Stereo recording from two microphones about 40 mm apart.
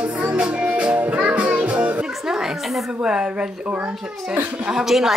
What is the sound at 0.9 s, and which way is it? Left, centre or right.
Music, right.